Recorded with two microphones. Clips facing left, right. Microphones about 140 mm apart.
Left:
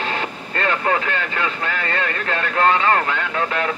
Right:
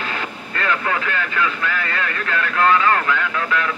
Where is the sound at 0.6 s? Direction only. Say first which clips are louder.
Left 2 dB; 35° left (ahead or behind).